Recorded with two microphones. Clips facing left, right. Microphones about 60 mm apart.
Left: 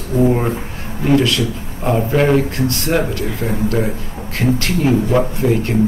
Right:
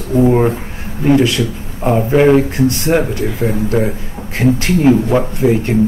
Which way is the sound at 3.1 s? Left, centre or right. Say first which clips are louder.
Right 3 dB; right.